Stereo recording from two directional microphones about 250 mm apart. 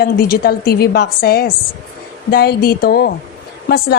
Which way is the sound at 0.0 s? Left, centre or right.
Left.